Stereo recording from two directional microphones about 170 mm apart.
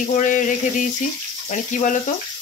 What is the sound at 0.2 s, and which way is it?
Speech, 50° left (ahead or behind).